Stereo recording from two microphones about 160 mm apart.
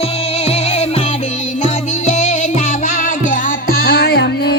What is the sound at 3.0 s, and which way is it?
Music, 60° left (ahead or behind).